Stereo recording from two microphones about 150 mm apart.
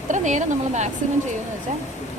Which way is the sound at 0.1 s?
55° right (ahead or behind).